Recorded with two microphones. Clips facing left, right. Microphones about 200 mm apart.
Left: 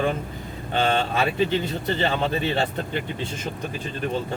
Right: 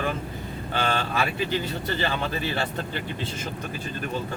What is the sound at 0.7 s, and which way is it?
Speech, 25° left (ahead or behind).